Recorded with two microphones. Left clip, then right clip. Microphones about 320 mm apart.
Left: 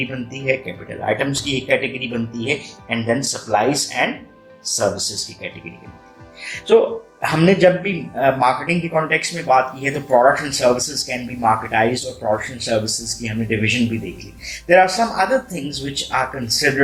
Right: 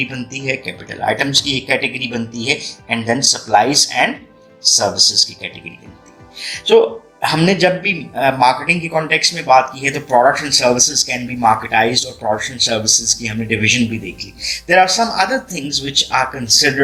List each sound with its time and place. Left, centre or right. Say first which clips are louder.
0.0 s speech: right 2 dB; right